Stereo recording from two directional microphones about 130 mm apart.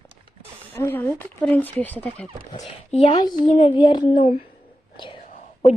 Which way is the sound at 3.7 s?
35° left (ahead or behind).